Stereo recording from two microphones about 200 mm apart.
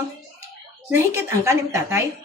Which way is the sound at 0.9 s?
15° right (ahead or behind).